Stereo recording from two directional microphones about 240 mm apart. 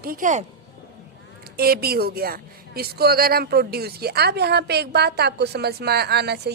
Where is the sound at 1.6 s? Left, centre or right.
Right.